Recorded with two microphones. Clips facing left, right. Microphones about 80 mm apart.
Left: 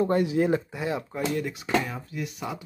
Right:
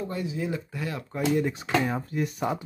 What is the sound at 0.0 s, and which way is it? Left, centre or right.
Speech, left.